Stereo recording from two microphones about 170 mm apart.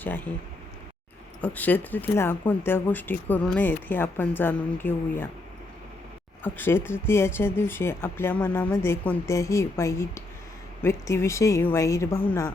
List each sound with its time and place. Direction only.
0.0 s speech: 10° left (ahead or behind)
1.4 s speech: 10° left (ahead or behind)
6.4 s speech: 15° left (ahead or behind)